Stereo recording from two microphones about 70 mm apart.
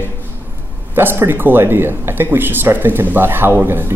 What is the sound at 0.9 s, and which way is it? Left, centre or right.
Speech, right.